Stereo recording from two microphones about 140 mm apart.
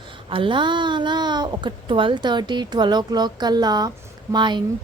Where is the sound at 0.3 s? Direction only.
40° right (ahead or behind).